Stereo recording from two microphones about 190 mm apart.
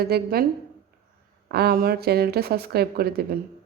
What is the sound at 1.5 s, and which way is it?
Speech, 55° right (ahead or behind).